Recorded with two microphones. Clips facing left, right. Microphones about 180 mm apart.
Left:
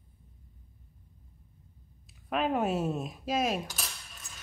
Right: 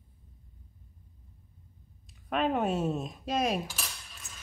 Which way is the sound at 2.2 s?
Centre (ahead or behind).